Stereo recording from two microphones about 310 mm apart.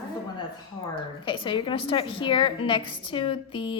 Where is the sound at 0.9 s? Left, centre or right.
Centre.